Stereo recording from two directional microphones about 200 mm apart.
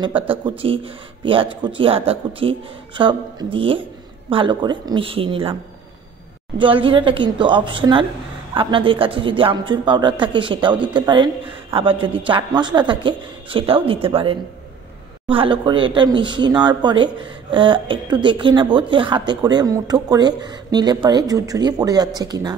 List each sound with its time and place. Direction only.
0.1 s speech: 10° right (ahead or behind)
0.6 s speech: 25° right (ahead or behind)
6.6 s speech: 25° right (ahead or behind)